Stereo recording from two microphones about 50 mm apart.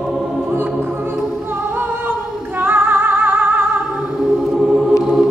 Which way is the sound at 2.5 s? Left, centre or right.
Right.